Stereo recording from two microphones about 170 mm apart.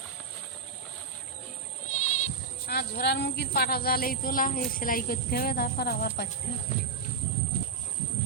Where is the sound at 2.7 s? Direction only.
70° left (ahead or behind).